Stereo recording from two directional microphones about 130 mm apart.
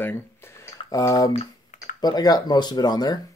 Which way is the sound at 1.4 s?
70° left (ahead or behind).